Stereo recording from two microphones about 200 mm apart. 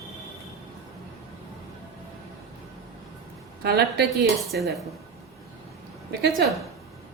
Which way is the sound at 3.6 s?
50° right (ahead or behind).